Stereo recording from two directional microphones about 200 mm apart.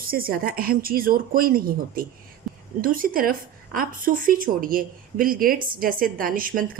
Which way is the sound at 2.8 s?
45° right (ahead or behind).